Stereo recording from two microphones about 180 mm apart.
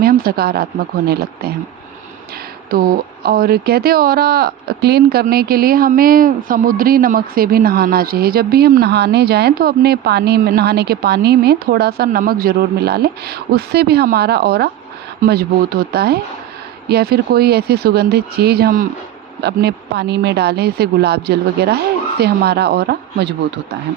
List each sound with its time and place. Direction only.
0.0 s speech: 55° right (ahead or behind)
2.6 s speech: 55° right (ahead or behind)
19.4 s speech: 65° right (ahead or behind)